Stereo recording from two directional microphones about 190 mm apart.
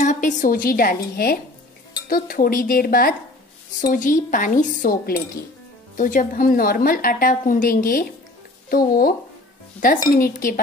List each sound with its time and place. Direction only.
0.0 s a woman's voice: 40° left (ahead or behind)
10.1 s a woman's voice: 45° left (ahead or behind)